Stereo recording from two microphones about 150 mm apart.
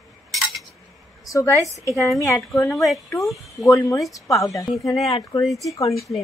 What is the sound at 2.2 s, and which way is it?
Speech, 20° left (ahead or behind).